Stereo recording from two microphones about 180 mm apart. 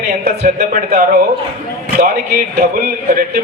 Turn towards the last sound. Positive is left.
turn(degrees=-50)  # may be behind; listen again after turning